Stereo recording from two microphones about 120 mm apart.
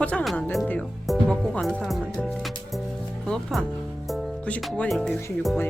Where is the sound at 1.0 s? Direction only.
Centre (ahead or behind).